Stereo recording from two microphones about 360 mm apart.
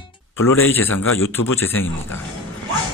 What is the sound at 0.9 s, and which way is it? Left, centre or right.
Speech, left.